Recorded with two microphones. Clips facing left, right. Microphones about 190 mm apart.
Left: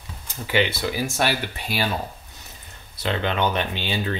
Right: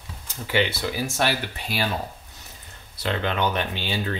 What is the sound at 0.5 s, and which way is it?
Speech, 15° left (ahead or behind).